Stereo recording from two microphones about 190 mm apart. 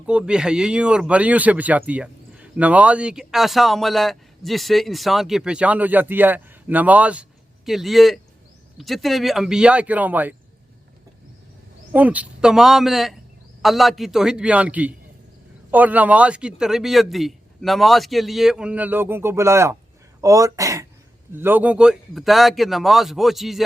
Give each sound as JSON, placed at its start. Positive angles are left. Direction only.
{"t": 0.0, "sound": "speech", "side_deg": -5}
{"t": 11.9, "sound": "speech", "side_deg": -10}